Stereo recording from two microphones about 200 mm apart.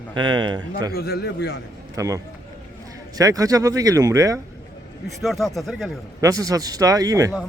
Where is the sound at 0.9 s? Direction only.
50° left (ahead or behind).